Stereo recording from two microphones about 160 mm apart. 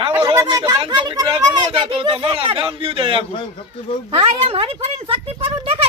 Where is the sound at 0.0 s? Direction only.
35° right (ahead or behind).